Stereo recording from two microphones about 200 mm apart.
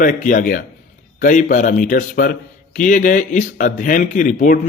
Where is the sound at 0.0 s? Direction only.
40° left (ahead or behind).